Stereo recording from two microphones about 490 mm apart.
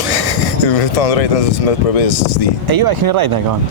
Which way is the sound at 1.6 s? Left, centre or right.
Left.